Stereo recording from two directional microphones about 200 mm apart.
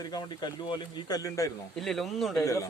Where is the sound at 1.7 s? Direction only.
Centre (ahead or behind).